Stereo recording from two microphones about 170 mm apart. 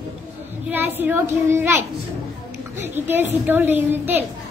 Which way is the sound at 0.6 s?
10° right (ahead or behind).